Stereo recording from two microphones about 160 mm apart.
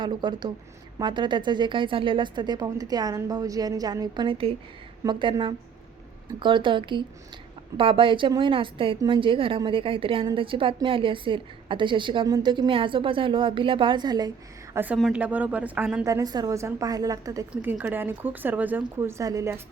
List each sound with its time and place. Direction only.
0.0 s a woman's voice: 30° right (ahead or behind)
14.7 s a woman's voice: 10° right (ahead or behind)
14.9 s speech: centre (ahead or behind)
15.2 s speech: 10° right (ahead or behind)
16.0 s a woman's voice: 20° right (ahead or behind)